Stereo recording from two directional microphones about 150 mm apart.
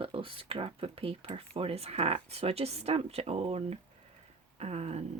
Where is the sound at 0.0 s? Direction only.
35° right (ahead or behind).